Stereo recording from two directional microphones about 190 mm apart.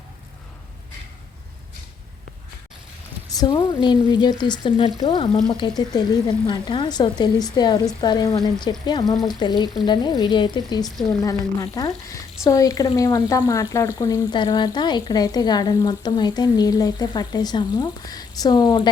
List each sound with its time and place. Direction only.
3.2 s speech: 20° left (ahead or behind)